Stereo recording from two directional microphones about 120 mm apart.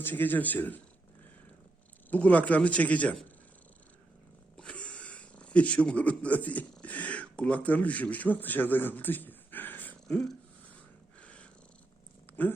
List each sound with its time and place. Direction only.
0.0 s speech: 15° left (ahead or behind)
2.0 s speech: 10° left (ahead or behind)
4.5 s speech: 10° left (ahead or behind)
11.2 s purr: 10° left (ahead or behind)
12.4 s speech: 15° left (ahead or behind)